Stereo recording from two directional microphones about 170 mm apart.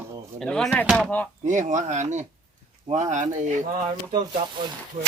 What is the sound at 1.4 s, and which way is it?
Speech, 45° right (ahead or behind).